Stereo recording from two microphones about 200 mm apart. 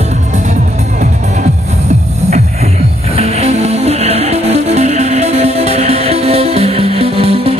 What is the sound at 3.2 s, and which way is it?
Music, 30° right (ahead or behind).